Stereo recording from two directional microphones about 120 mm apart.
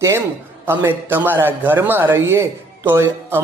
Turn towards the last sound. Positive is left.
turn(degrees=-20)  # may be behind; listen again after turning